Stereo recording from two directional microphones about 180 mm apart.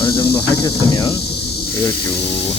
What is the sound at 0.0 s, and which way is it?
Cricket, 20° left (ahead or behind).